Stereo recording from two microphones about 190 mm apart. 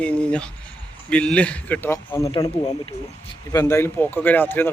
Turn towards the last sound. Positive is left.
turn(degrees=10)  # may be behind; listen again after turning